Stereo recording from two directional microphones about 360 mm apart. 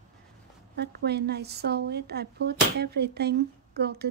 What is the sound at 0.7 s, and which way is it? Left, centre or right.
A woman's voice, right.